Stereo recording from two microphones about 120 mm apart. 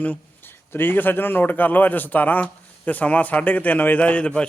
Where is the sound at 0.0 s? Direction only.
15° left (ahead or behind).